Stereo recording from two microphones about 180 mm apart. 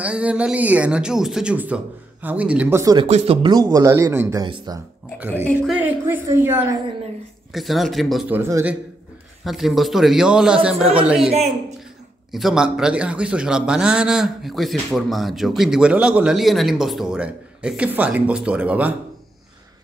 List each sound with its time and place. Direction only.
0.0 s speech: 5° right (ahead or behind)
2.8 s speech: 20° right (ahead or behind)
3.6 s speech: 15° right (ahead or behind)
5.6 s speech: 10° right (ahead or behind)
7.5 s a man's voice: centre (ahead or behind)
8.4 s speech: 15° right (ahead or behind)
9.4 s a man's voice: centre (ahead or behind)